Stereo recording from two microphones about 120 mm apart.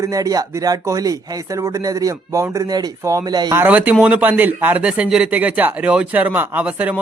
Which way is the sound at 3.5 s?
15° right (ahead or behind).